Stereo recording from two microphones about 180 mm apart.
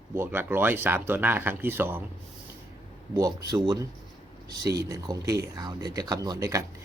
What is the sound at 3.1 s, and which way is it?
Speech, 20° right (ahead or behind).